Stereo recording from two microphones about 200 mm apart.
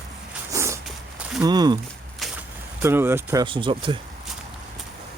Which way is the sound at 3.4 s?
25° right (ahead or behind).